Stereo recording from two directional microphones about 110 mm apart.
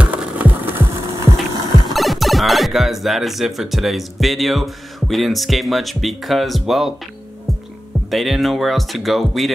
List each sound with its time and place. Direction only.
0.0 s splinter: 15° right (ahead or behind)
2.0 s speech: centre (ahead or behind)
8.1 s speech: centre (ahead or behind)